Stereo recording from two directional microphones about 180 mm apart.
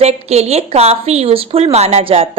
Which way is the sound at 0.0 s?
35° right (ahead or behind).